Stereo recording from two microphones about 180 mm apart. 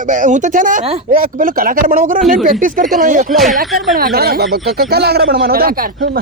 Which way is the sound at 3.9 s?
55° right (ahead or behind).